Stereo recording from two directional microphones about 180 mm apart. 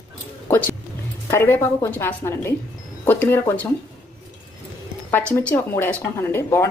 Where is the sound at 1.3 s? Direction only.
15° left (ahead or behind).